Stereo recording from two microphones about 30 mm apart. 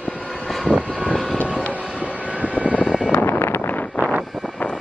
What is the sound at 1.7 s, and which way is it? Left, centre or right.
Vehicle, right.